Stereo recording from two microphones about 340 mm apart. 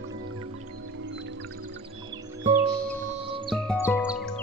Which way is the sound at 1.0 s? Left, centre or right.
Right.